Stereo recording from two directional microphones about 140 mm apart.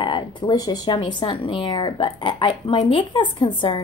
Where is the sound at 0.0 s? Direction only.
35° left (ahead or behind).